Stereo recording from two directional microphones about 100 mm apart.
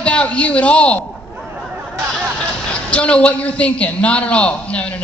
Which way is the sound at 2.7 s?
10° left (ahead or behind).